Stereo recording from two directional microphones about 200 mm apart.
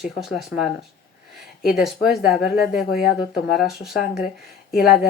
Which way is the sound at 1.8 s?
Centre (ahead or behind).